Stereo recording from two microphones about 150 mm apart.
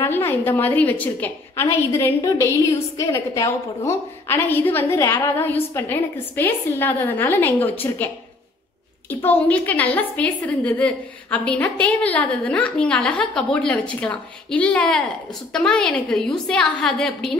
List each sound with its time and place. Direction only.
0.0 s a woman's voice: 15° left (ahead or behind)
9.2 s a woman's voice: 10° left (ahead or behind)